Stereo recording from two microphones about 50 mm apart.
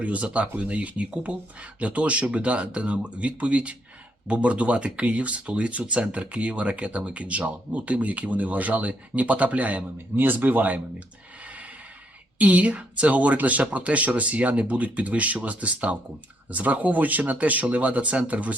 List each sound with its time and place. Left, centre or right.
0.0 s speech: right
10.2 s speech: right
11.4 s a sound: right
12.4 s speech: right